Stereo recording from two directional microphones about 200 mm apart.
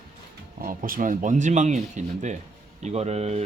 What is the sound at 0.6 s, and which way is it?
Speech, 45° right (ahead or behind).